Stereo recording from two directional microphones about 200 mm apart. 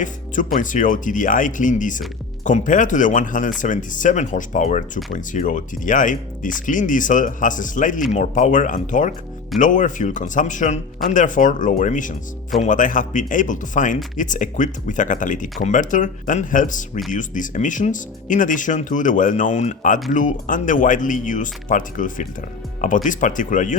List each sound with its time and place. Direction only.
0.0 s speech: 40° left (ahead or behind)